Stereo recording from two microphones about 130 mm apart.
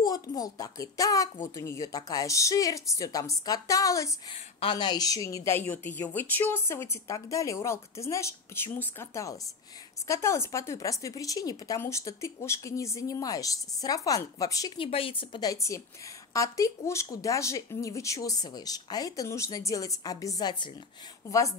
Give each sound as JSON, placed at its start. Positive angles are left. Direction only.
{"t": 0.0, "sound": "speech", "side_deg": 30}
{"t": 4.6, "sound": "speech", "side_deg": 40}
{"t": 14.8, "sound": "speech", "side_deg": 45}
{"t": 15.5, "sound": "speech", "side_deg": 25}